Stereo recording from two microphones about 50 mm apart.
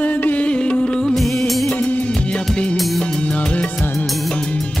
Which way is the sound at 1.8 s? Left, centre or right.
Left.